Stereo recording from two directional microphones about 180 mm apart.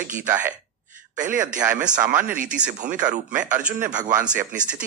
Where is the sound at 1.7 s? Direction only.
45° right (ahead or behind).